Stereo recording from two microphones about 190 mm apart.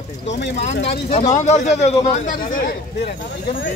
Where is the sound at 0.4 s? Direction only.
70° left (ahead or behind).